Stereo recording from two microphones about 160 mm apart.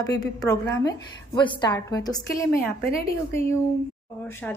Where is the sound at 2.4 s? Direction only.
10° left (ahead or behind).